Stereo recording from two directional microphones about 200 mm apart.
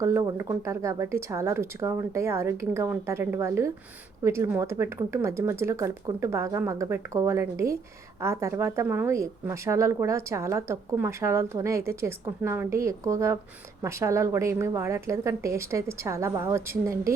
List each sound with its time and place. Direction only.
0.0 s speech: 15° right (ahead or behind)